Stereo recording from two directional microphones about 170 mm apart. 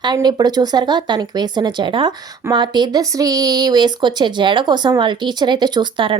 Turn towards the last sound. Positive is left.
turn(degrees=-30)  # may be behind; listen again after turning